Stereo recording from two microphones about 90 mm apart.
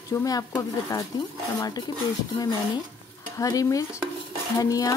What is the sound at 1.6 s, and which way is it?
Speech, 50° left (ahead or behind).